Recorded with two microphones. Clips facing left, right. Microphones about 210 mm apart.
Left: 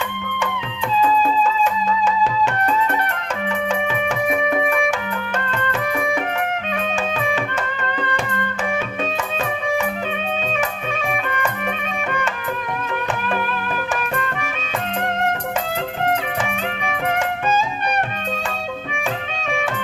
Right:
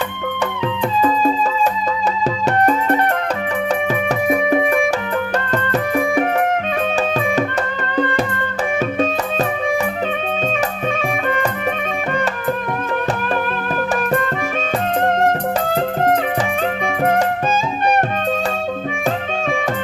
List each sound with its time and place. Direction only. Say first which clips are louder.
1.0 s music: even; 40° right (ahead or behind)
4.3 s music: right 4 dB; 35° right (ahead or behind)
17.1 s music: right 2 dB; 45° right (ahead or behind)